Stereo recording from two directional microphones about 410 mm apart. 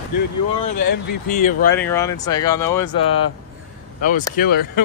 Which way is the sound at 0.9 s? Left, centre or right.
Left.